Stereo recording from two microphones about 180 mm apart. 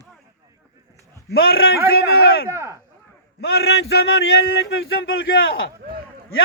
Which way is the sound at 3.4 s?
65° left (ahead or behind).